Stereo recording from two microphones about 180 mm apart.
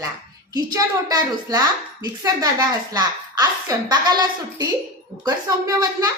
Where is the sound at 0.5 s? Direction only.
20° right (ahead or behind).